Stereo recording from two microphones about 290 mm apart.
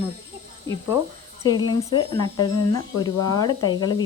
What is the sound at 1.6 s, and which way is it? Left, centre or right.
Speech, centre.